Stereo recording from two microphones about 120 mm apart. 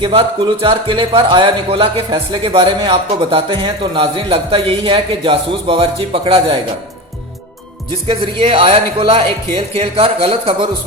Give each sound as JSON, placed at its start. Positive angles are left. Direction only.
{"t": 0.0, "sound": "speech", "side_deg": -50}
{"t": 8.0, "sound": "speech", "side_deg": -50}